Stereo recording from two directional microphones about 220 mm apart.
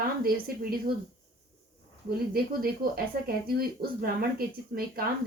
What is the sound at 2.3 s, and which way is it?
Speech, 45° right (ahead or behind).